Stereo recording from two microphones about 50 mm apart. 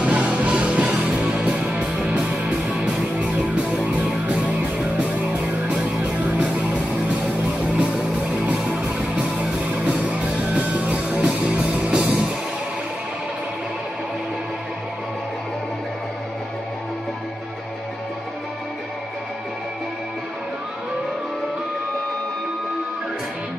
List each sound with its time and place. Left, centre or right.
0.0 s music: right
5.7 s music: right